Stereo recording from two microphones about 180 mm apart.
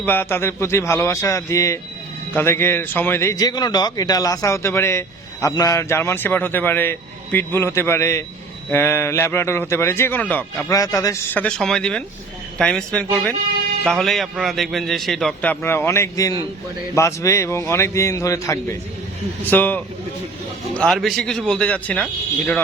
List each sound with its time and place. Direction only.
0.0 s a man's voice: 10° left (ahead or behind)